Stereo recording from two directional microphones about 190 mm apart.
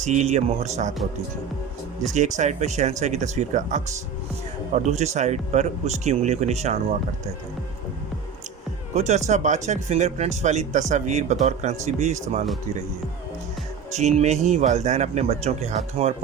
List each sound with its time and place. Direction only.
0.0 s speech: 35° right (ahead or behind)
2.1 s speech: 40° right (ahead or behind)
9.0 s speech: 35° right (ahead or behind)
13.9 s speech: 35° right (ahead or behind)